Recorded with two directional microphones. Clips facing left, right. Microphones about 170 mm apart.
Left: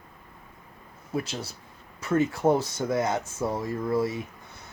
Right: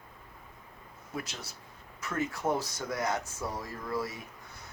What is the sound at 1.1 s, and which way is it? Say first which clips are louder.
Speech: left 9 dB; 30° left (ahead or behind).